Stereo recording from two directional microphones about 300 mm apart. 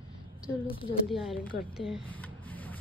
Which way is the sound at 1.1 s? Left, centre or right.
Centre.